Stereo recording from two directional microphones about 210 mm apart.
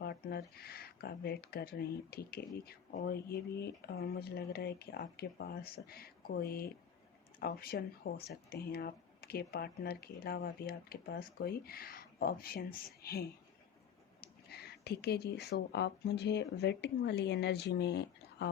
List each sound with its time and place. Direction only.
0.0 s speech: 50° left (ahead or behind)
14.5 s speech: 50° left (ahead or behind)